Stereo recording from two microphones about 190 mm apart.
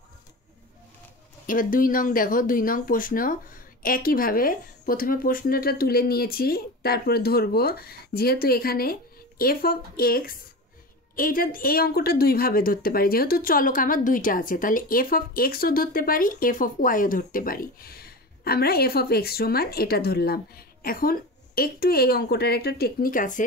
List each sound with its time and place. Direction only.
1.5 s a woman's voice: 45° left (ahead or behind)